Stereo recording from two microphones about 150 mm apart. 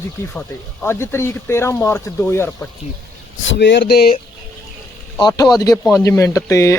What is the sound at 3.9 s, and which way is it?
Speech, 90° left.